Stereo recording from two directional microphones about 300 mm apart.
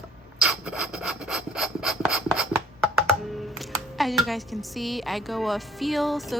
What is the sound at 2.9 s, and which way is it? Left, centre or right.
Speech, centre.